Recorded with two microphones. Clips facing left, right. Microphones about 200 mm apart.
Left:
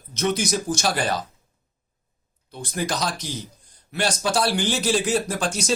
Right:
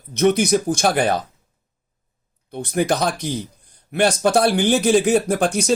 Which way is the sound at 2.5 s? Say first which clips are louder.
Right 7 dB; 60° right (ahead or behind).